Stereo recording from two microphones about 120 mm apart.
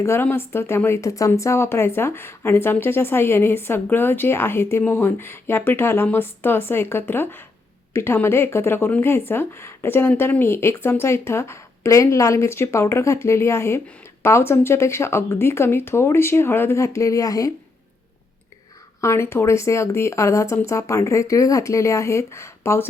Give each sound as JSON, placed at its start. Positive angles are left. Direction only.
{"t": 0.0, "sound": "speech", "side_deg": 20}
{"t": 19.0, "sound": "speech", "side_deg": 20}